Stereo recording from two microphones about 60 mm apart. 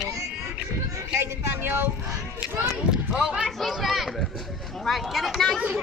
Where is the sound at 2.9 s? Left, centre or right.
Centre.